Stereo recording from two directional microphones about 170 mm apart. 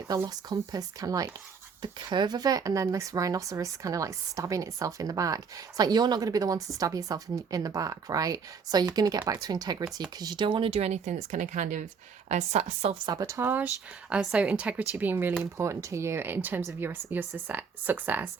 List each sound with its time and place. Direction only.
0.1 s a woman's voice: 20° right (ahead or behind); by 13.0 s 40° right (ahead or behind)
13.1 s speech: 20° right (ahead or behind)